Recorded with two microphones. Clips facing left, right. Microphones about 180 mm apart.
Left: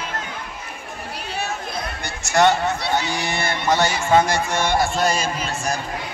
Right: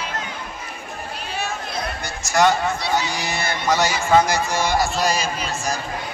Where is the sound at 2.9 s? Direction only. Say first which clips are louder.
Even; 60° left (ahead or behind).